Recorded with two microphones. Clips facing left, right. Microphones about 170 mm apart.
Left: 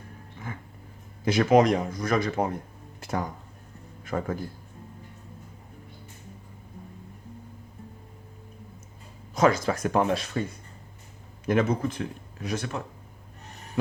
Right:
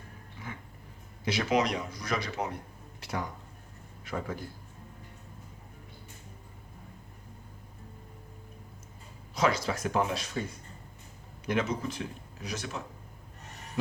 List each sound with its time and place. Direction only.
1.2 s speech: 45° left (ahead or behind)
3.0 s a sound: 45° left (ahead or behind)
4.0 s speech: 50° left (ahead or behind)
9.3 s speech: 50° left (ahead or behind)
11.4 s speech: 50° left (ahead or behind)